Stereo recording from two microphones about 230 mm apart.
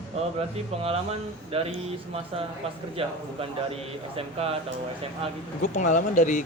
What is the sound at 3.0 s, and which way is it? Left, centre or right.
Speech, right.